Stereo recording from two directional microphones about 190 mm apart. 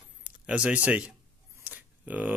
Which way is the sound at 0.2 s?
5° right (ahead or behind).